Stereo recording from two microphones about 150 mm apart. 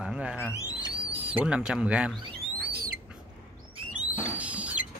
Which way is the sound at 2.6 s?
85° right.